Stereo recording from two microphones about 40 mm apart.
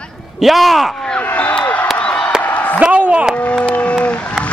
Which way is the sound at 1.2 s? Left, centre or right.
Left.